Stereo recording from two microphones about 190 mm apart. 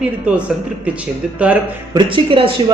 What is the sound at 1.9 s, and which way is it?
Speech, 25° right (ahead or behind).